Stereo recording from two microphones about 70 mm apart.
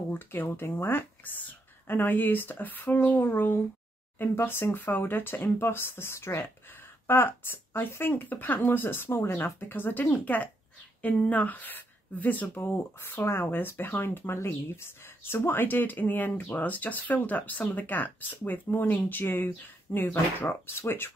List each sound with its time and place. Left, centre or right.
0.1 s speech: left